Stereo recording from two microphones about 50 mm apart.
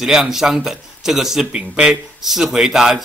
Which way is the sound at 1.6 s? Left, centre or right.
Centre.